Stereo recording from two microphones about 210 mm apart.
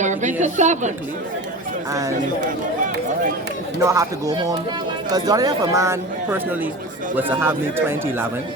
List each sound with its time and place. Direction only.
0.0 s a woman's voice: 35° right (ahead or behind)
1.9 s speech: 15° right (ahead or behind)
3.8 s speech: 15° right (ahead or behind)